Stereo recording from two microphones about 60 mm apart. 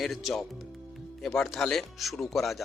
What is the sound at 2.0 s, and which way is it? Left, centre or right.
Speech, centre.